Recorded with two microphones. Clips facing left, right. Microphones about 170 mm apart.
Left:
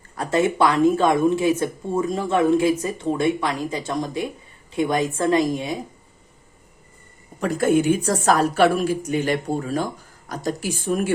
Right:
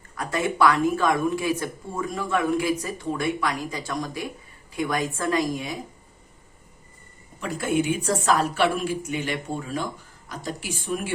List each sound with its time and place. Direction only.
0.2 s speech: 25° left (ahead or behind)
7.3 s a woman's voice: 40° left (ahead or behind)